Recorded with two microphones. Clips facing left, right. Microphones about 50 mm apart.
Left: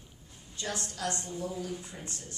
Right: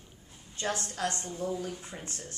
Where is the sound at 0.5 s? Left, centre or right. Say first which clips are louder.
Right 4 dB; right.